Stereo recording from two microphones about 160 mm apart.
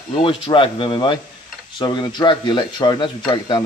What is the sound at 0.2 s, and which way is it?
Speech, 35° left (ahead or behind).